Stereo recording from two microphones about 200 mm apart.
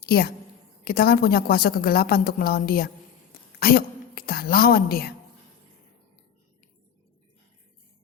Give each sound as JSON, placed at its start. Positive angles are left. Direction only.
{"t": 0.0, "sound": "a woman's voice", "side_deg": 50}